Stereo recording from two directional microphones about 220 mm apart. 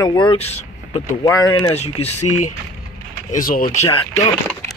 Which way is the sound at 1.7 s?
30° left (ahead or behind).